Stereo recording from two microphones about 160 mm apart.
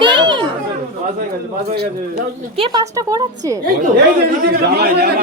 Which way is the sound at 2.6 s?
25° right (ahead or behind).